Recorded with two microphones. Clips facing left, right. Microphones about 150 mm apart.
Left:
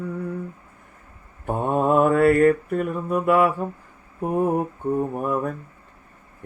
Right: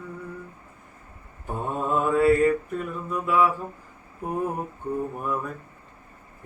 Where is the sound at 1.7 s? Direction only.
60° left (ahead or behind).